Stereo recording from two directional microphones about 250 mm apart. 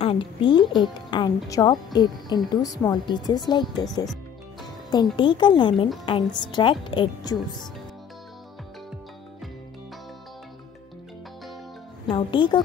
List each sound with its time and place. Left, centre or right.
0.0 s a woman's voice: left
12.1 s a woman's voice: centre